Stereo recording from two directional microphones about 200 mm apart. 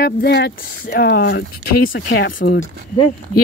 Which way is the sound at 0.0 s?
55° left (ahead or behind).